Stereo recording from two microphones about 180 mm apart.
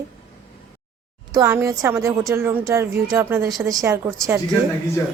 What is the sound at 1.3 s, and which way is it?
A woman's voice, 15° right (ahead or behind).